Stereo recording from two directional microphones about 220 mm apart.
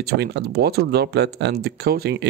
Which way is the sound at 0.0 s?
45° right (ahead or behind).